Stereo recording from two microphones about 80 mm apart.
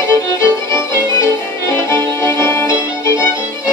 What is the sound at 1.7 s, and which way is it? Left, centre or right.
Music, left.